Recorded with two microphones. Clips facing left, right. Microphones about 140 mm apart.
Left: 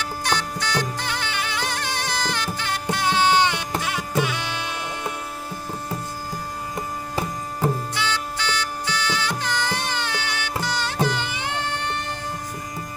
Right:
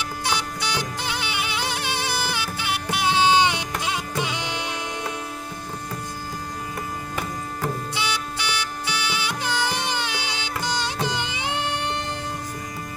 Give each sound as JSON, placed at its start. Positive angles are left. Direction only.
{"t": 0.0, "sound": "music", "side_deg": -10}
{"t": 7.9, "sound": "music", "side_deg": -15}